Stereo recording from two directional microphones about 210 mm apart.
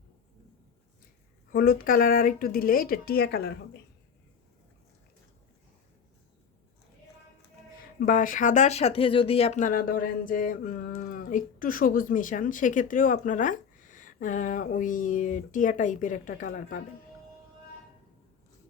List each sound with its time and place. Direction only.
1.5 s speech: 45° left (ahead or behind)
7.9 s speech: 40° left (ahead or behind)